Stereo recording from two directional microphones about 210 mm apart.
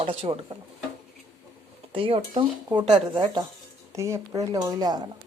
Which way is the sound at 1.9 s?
25° right (ahead or behind).